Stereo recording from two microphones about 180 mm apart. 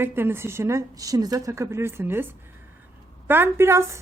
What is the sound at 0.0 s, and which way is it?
A woman's voice, 10° right (ahead or behind).